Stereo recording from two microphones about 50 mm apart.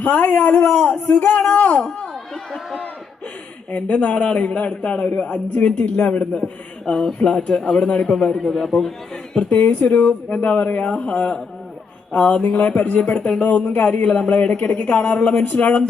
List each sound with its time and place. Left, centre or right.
0.0 s a man's voice: left
3.7 s a man's voice: left
6.8 s a man's voice: centre
8.4 s a man's voice: centre
9.3 s a woman's voice: left
15.4 s speech: left